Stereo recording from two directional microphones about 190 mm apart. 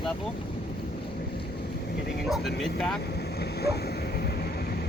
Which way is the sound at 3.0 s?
60° left (ahead or behind).